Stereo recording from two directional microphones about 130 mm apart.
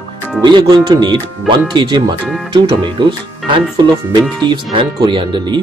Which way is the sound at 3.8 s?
35° right (ahead or behind).